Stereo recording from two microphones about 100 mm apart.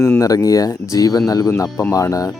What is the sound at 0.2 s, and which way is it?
Speech, 35° left (ahead or behind).